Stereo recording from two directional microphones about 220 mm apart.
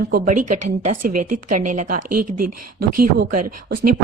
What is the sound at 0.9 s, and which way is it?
A woman's voice, 35° right (ahead or behind).